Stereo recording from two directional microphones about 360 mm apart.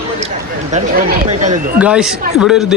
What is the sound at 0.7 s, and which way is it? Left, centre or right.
Speech, right.